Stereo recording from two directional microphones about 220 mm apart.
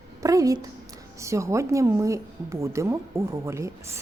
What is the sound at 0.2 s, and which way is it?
A woman's voice, 15° right (ahead or behind).